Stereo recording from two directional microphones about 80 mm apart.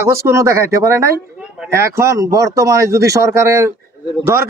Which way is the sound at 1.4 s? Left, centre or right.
Centre.